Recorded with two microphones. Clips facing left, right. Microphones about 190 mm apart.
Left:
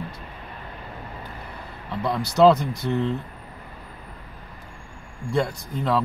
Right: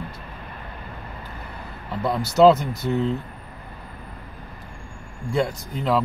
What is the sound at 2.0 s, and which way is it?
Speech, centre (ahead or behind).